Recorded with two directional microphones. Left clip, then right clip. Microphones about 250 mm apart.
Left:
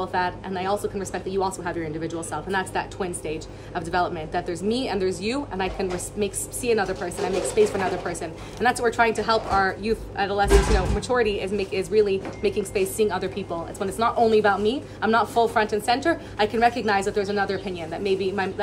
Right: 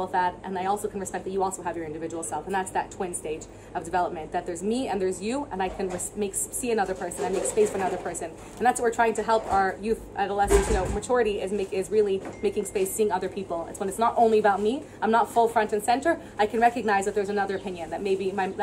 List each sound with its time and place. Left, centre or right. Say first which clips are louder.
0.0 s a woman's voice: even; centre